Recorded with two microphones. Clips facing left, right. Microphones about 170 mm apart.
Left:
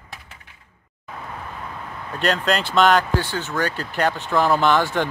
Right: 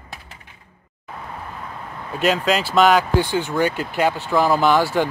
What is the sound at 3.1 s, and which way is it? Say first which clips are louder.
Speech: right 5 dB; 15° right (ahead or behind).